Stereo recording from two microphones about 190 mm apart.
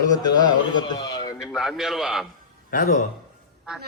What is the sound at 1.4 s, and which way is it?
Speech, centre (ahead or behind).